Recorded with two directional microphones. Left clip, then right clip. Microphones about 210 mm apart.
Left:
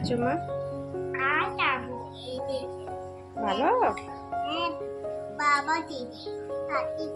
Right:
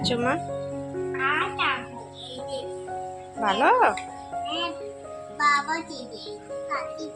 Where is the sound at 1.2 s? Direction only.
20° left (ahead or behind).